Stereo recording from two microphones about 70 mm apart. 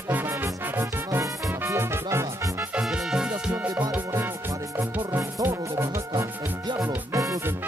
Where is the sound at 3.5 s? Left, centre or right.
Right.